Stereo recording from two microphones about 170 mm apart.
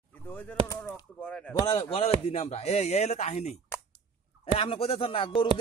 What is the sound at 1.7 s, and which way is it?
Speech, 35° left (ahead or behind).